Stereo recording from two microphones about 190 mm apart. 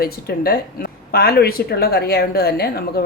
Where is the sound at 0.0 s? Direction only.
50° left (ahead or behind).